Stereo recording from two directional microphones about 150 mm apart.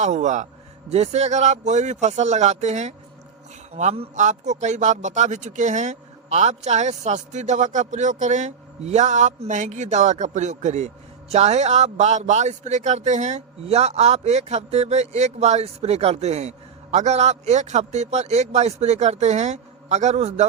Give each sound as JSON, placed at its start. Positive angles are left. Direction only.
{"t": 0.0, "sound": "a man's voice", "side_deg": -50}